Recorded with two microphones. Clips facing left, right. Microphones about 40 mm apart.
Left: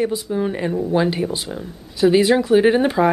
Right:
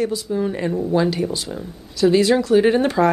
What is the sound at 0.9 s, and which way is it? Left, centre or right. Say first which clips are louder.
Speech: even; left.